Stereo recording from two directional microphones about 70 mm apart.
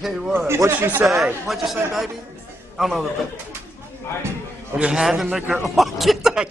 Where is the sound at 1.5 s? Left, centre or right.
Centre.